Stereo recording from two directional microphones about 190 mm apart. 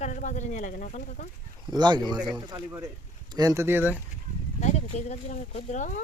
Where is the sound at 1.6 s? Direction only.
20° right (ahead or behind).